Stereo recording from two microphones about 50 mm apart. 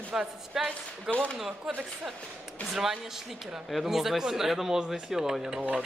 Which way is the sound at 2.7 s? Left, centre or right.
Centre.